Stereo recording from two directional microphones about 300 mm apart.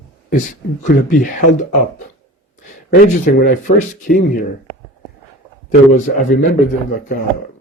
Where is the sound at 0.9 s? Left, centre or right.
Left.